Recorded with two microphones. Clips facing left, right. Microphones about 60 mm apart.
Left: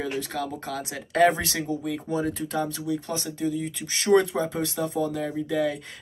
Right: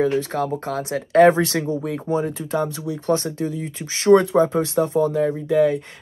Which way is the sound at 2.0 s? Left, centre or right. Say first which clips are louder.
Right 5 dB; right.